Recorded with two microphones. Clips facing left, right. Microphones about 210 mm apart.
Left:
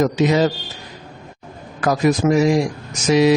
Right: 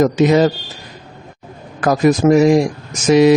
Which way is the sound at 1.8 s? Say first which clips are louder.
Right 4 dB; 50° right (ahead or behind).